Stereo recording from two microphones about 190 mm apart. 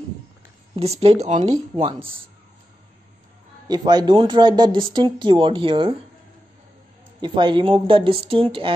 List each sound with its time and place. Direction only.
0.7 s speech: 35° right (ahead or behind)
3.6 s speech: 20° right (ahead or behind)
7.2 s speech: 25° right (ahead or behind)